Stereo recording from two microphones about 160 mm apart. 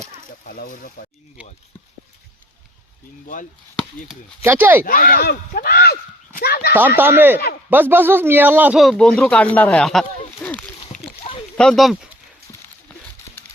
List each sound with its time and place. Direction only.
0.0 s a sound: 40° right (ahead or behind)
0.4 s speech: 70° left (ahead or behind)
1.4 s a man's voice: 5° right (ahead or behind)
4.4 s a man's voice: 10° right (ahead or behind)
4.9 s speech: 65° left (ahead or behind); by 6.7 s 80° left
6.7 s a man's voice: 10° right (ahead or behind)
8.8 s speech: 5° left (ahead or behind)
11.2 s a sound: 35° left (ahead or behind)
11.5 s speech: 5° left (ahead or behind)
12.5 s a sound: 15° left (ahead or behind)